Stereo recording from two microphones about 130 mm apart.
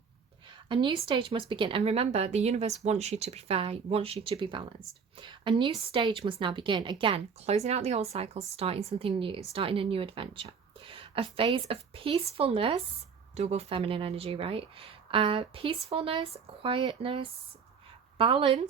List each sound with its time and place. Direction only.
0.7 s a woman's voice: 40° right (ahead or behind)
7.0 s speech: 50° right (ahead or behind)
13.3 s speech: 55° right (ahead or behind)